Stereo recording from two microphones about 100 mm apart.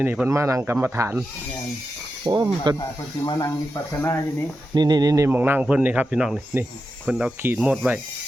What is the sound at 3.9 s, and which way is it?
Speech, 25° left (ahead or behind).